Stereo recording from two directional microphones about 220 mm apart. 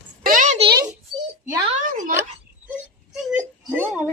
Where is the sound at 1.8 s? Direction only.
35° right (ahead or behind).